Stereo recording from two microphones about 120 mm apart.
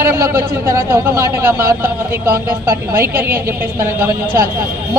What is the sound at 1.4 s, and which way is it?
Speech, 25° right (ahead or behind).